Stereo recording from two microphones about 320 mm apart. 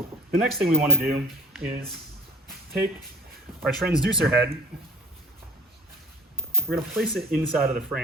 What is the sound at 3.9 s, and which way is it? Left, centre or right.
Speech, centre.